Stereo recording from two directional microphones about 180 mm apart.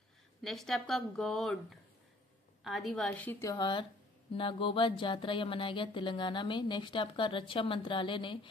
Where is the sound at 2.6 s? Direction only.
Centre (ahead or behind); by 3.9 s 25° left (ahead or behind).